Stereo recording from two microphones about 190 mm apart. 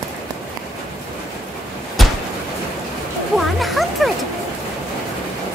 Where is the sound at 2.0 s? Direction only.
Centre (ahead or behind).